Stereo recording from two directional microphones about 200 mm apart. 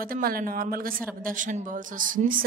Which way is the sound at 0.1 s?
45° right (ahead or behind).